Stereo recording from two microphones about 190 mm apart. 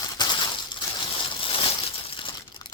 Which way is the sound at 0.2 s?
20° left (ahead or behind).